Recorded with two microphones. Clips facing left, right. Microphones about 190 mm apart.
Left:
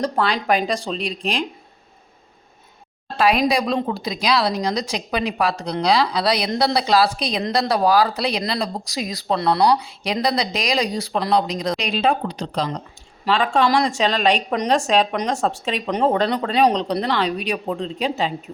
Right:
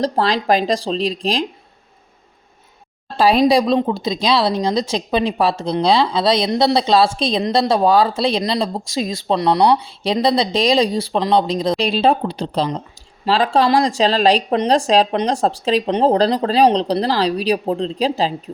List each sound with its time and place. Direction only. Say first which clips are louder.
0.0 s speech: right 3 dB; 35° right (ahead or behind)
3.2 s speech: right 5 dB; 30° right (ahead or behind)
9.7 s speech: right 4 dB; 30° right (ahead or behind)